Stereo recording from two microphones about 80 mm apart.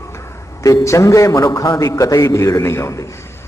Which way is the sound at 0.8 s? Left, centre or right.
Left.